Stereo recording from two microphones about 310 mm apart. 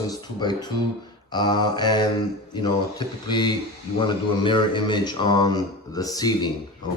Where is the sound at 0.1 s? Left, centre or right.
Centre.